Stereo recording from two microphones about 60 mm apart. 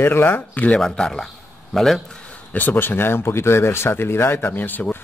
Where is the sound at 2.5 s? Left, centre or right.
Left.